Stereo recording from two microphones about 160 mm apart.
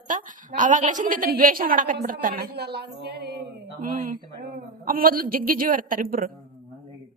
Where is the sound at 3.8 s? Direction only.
60° right (ahead or behind).